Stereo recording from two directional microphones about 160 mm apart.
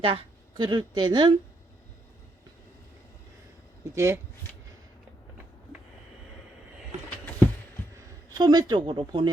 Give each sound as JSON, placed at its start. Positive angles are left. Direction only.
{"t": 0.0, "sound": "speech", "side_deg": -35}
{"t": 3.9, "sound": "speech", "side_deg": -15}
{"t": 8.3, "sound": "speech", "side_deg": -25}